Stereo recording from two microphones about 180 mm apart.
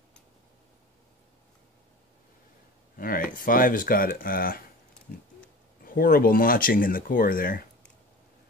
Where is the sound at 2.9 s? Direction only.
50° left (ahead or behind).